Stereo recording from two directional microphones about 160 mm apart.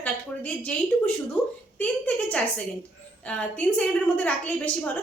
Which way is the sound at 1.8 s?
10° left (ahead or behind).